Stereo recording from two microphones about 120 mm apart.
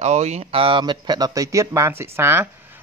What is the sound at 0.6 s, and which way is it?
Speech, 40° right (ahead or behind).